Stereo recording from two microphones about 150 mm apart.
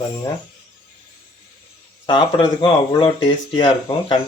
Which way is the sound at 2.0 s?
30° left (ahead or behind).